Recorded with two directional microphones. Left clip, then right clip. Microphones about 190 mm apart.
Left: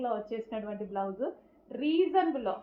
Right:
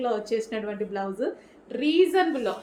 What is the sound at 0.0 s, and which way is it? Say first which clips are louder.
A woman's voice: right 7 dB; 30° right (ahead or behind).